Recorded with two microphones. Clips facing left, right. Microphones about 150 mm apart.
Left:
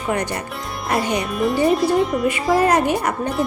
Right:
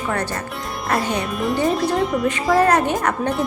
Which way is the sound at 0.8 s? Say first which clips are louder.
Left 1 dB; centre (ahead or behind).